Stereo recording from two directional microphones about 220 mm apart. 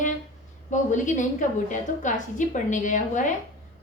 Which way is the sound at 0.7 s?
35° left (ahead or behind).